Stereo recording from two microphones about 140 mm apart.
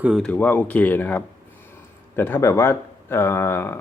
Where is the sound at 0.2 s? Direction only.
10° left (ahead or behind).